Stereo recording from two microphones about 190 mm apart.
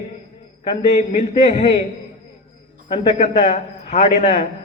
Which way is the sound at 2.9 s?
30° left (ahead or behind).